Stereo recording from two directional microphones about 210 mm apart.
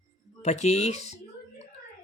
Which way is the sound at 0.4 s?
35° left (ahead or behind).